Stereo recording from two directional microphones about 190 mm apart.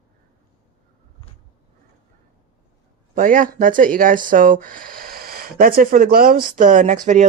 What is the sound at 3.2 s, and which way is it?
Speech, 45° right (ahead or behind).